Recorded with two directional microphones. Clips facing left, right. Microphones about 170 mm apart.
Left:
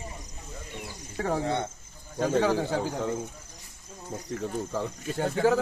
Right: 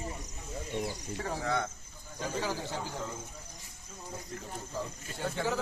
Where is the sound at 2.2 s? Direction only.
70° left (ahead or behind).